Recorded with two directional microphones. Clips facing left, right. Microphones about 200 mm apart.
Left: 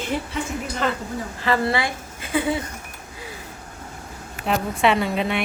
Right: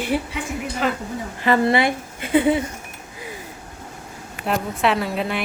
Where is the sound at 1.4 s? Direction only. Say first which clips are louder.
Right 5 dB; 20° right (ahead or behind).